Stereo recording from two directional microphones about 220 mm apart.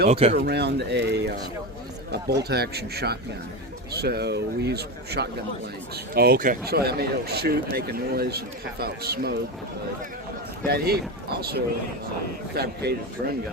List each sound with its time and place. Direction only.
0.1 s speech: 30° right (ahead or behind)
0.3 s speech: 50° right (ahead or behind)
2.4 s speech: 45° right (ahead or behind)
10.7 s speech: 45° right (ahead or behind)